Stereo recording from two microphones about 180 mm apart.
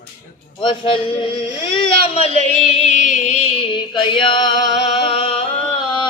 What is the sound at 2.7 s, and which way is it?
Music, 40° left (ahead or behind).